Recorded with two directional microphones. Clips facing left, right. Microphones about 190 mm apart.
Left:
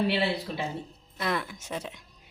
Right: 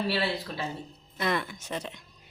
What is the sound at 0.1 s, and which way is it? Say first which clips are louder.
Speech: left 2 dB; 20° left (ahead or behind).